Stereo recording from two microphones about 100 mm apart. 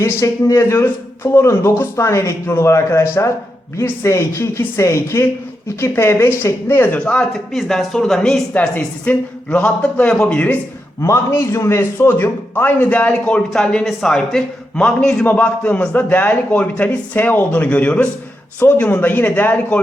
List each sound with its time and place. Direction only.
0.0 s a man's voice: 30° left (ahead or behind)
7.0 s a man's voice: 5° left (ahead or behind)
8.5 s a man's voice: 15° left (ahead or behind)
11.0 s a man's voice: 30° left (ahead or behind)